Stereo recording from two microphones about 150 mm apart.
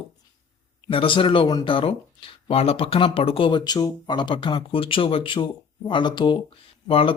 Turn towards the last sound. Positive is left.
turn(degrees=35)  # may be behind; listen again after turning